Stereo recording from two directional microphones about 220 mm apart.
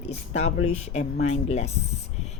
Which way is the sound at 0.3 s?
30° left (ahead or behind).